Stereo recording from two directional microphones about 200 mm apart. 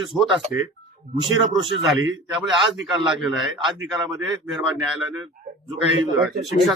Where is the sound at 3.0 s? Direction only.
5° right (ahead or behind).